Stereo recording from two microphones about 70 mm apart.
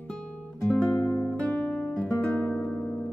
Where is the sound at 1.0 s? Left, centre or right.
Left.